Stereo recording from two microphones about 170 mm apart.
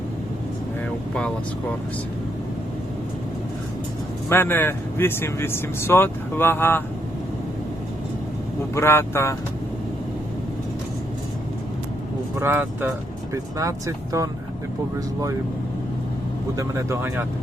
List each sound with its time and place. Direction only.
4.3 s speech: 10° left (ahead or behind)
8.7 s speech: 15° left (ahead or behind)
12.4 s speech: 15° right (ahead or behind)
16.6 s speech: 15° right (ahead or behind)